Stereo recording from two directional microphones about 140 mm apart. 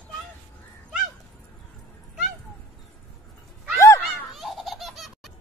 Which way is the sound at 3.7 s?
20° left (ahead or behind).